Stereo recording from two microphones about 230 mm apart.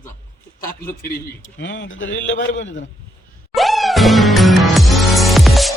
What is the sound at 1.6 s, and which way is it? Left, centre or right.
A man's voice, left.